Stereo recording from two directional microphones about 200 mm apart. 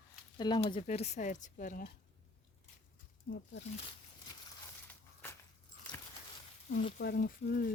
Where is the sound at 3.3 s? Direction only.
55° left (ahead or behind).